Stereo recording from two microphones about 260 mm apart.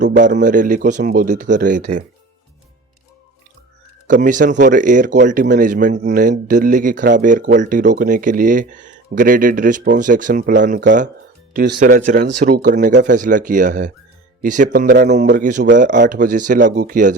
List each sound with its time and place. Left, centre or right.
0.2 s speech: right
4.0 s speech: right